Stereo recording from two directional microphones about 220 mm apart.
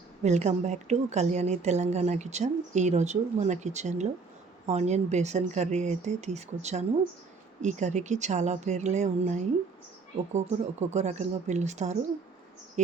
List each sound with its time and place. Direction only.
0.2 s speech: 30° right (ahead or behind)